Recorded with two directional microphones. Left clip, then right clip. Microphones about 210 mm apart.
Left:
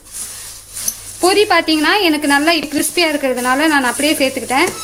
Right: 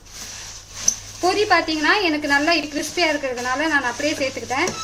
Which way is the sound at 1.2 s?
45° left (ahead or behind).